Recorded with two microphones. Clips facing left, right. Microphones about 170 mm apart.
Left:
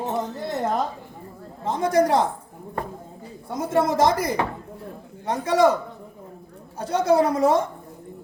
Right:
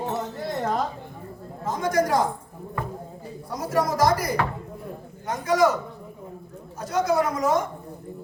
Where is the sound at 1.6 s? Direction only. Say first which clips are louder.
Left 3 dB; 30° left (ahead or behind).